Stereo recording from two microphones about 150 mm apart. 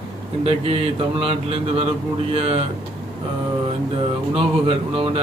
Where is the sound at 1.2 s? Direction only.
40° right (ahead or behind).